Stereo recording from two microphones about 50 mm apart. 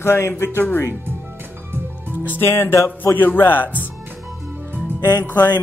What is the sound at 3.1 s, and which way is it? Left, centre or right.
Speech, left.